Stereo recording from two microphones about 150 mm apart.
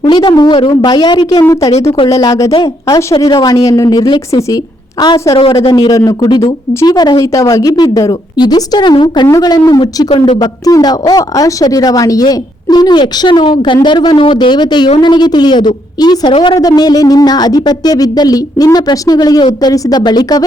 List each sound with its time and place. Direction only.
0.0 s speech: 30° left (ahead or behind)